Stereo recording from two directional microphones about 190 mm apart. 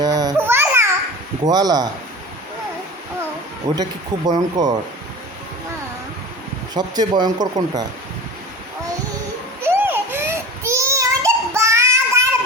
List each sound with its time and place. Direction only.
0.0 s babbling: 20° right (ahead or behind)
1.5 s speech: 20° right (ahead or behind)
3.6 s speech: 15° right (ahead or behind)
6.7 s speech: 20° right (ahead or behind)
9.6 s a sound: 10° right (ahead or behind)